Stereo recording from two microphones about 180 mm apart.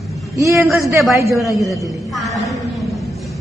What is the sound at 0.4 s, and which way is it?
A woman's voice, 15° right (ahead or behind).